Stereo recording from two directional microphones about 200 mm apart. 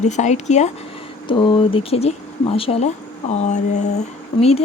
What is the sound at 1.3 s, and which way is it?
A woman's voice, 25° left (ahead or behind).